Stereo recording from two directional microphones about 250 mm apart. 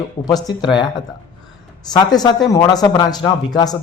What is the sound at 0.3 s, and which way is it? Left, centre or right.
Speech, centre.